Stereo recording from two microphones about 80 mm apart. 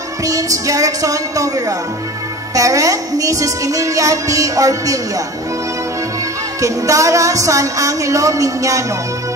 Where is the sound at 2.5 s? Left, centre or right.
Right.